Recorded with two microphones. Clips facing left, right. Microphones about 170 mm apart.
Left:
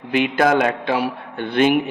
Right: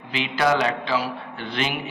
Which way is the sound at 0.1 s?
50° left (ahead or behind).